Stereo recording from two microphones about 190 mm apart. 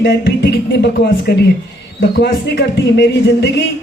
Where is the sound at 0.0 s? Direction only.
65° left (ahead or behind).